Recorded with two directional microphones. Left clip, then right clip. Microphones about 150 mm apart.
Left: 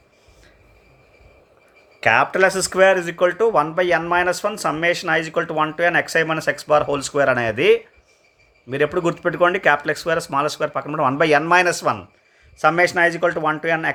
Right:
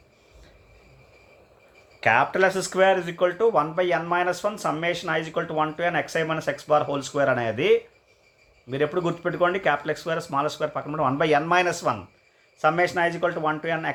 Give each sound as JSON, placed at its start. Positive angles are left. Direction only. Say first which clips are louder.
{"t": 2.0, "sound": "speech", "louder": "left 4 dB", "side_deg": 35}